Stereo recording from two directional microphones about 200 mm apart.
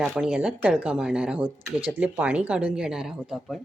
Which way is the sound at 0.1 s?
5° right (ahead or behind).